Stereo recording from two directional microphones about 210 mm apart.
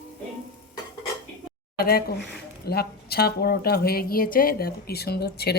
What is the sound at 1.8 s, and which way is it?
Speech, 45° left (ahead or behind).